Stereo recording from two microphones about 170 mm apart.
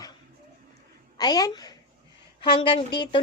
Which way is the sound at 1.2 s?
25° left (ahead or behind).